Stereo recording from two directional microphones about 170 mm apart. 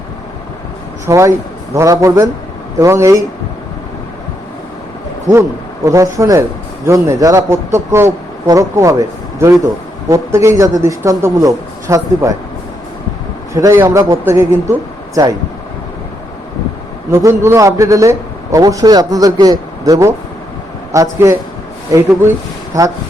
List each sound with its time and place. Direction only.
1.0 s a man's voice: 15° right (ahead or behind)
5.3 s a man's voice: 15° right (ahead or behind)
13.5 s a man's voice: 20° right (ahead or behind)
17.1 s a man's voice: 15° right (ahead or behind)
22.7 s a man's voice: 20° right (ahead or behind)